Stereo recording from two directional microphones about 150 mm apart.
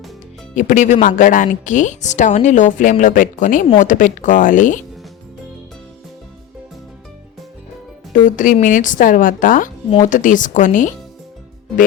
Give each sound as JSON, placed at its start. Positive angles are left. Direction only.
{"t": 0.5, "sound": "speech", "side_deg": 55}
{"t": 8.1, "sound": "speech", "side_deg": 60}